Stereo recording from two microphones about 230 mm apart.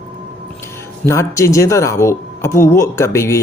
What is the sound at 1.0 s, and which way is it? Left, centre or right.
Speech, centre.